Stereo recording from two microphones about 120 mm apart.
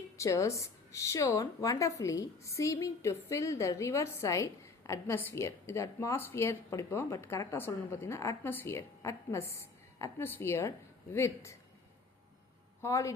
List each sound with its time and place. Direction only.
0.2 s speech: 25° left (ahead or behind)
12.8 s speech: 25° left (ahead or behind)